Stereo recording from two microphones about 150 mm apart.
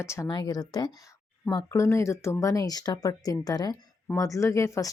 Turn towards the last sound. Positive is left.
turn(degrees=20)  # may be behind; listen again after turning